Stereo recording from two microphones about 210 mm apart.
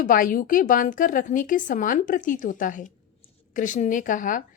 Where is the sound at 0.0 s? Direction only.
40° left (ahead or behind).